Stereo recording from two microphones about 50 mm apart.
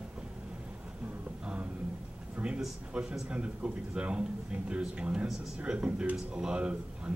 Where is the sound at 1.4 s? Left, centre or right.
Right.